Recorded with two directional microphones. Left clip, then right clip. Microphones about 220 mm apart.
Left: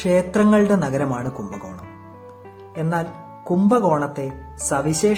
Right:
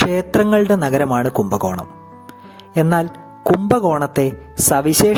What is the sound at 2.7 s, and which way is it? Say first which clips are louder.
Speech: right 8 dB; 45° right (ahead or behind).